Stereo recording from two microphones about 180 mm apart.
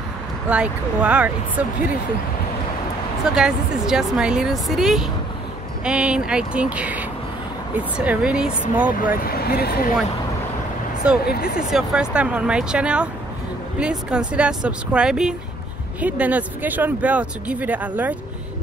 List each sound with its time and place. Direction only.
0.5 s speech: 5° right (ahead or behind)
3.3 s speech: 5° right (ahead or behind)
9.2 s speech: 55° left (ahead or behind)
11.2 s speech: 55° left (ahead or behind)
11.7 s speech: 5° right (ahead or behind)